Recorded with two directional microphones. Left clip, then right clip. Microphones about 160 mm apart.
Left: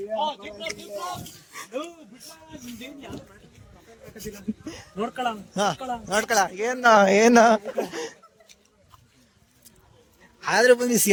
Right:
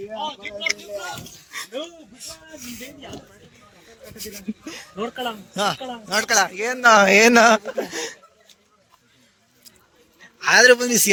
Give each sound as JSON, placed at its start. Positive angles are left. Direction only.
{"t": 0.2, "sound": "speech", "side_deg": 20}
{"t": 4.6, "sound": "speech", "side_deg": 10}
{"t": 4.9, "sound": "speech", "side_deg": 30}
{"t": 5.5, "sound": "speech", "side_deg": 15}
{"t": 10.2, "sound": "a man's voice", "side_deg": 10}